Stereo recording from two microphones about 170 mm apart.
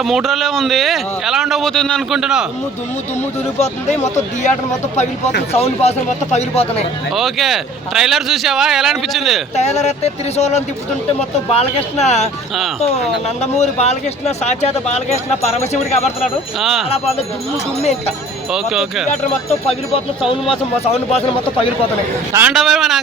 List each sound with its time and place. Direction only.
0.0 s speech: centre (ahead or behind)
3.6 s speech: 40° left (ahead or behind)
7.1 s speech: centre (ahead or behind)
9.6 s speech: 40° left (ahead or behind)
16.6 s speech: centre (ahead or behind)
17.7 s speech: 40° left (ahead or behind)
18.5 s speech: 5° right (ahead or behind)
20.8 s speech: 35° left (ahead or behind)
22.4 s speech: centre (ahead or behind)